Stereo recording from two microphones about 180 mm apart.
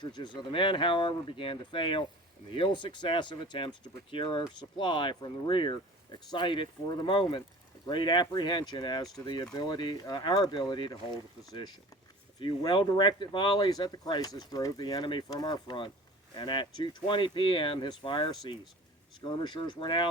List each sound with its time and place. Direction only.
0.0 s speech: 25° left (ahead or behind)